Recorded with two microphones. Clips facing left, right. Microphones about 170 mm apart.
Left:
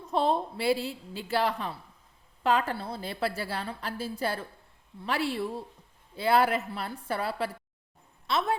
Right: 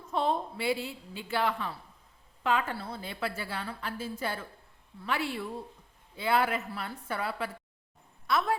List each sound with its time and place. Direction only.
0.1 s a woman's voice: 35° left (ahead or behind)
8.3 s a woman's voice: 25° left (ahead or behind)